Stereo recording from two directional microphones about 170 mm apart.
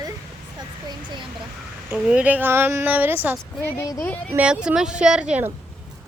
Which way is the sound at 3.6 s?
15° left (ahead or behind).